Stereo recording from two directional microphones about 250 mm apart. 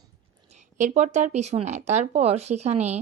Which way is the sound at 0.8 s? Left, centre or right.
Right.